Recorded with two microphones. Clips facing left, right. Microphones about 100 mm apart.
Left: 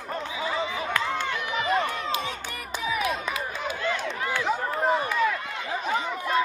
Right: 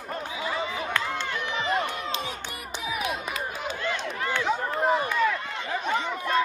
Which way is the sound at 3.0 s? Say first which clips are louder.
Left 2 dB; 40° left (ahead or behind).